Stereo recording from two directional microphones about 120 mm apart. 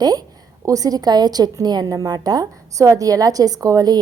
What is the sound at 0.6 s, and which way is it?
A woman's voice, 30° right (ahead or behind).